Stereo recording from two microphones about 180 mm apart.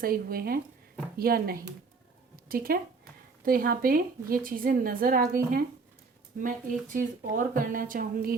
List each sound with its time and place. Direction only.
0.0 s speech: 55° right (ahead or behind)
2.3 s a sound: 55° right (ahead or behind)
3.4 s a woman's voice: 55° right (ahead or behind)
6.4 s a woman's voice: 50° right (ahead or behind)